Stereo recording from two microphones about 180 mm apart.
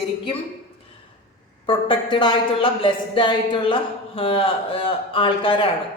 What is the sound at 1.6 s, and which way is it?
A woman's voice, 25° left (ahead or behind).